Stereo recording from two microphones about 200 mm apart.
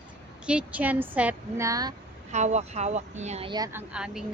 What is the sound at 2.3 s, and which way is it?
A woman's voice, 35° right (ahead or behind).